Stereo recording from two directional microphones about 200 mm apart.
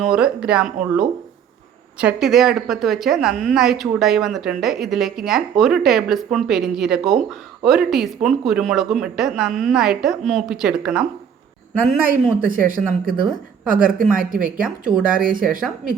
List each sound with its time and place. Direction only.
0.0 s a woman's voice: 5° right (ahead or behind)
12.4 s speech: 45° right (ahead or behind)
14.6 s a woman's voice: 5° right (ahead or behind)
15.0 s speech: 45° right (ahead or behind)